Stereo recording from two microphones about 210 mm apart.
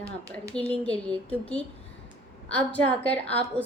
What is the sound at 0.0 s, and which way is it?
Speech, 15° right (ahead or behind).